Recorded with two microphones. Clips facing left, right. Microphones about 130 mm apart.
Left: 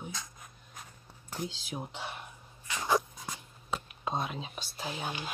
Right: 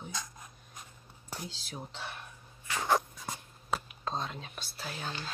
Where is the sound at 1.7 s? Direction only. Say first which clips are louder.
Left 3 dB; 15° left (ahead or behind).